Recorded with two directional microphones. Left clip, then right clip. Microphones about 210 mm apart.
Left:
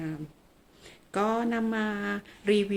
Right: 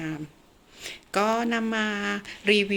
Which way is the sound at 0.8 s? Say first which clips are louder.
Right 4 dB; 10° left (ahead or behind).